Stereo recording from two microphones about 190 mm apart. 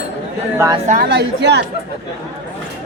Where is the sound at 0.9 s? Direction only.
55° right (ahead or behind).